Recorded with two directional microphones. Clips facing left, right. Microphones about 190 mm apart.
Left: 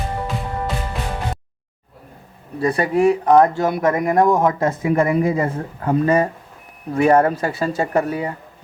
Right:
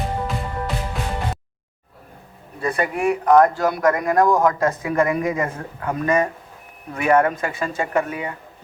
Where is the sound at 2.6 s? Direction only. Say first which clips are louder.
Left 5 dB; 35° left (ahead or behind).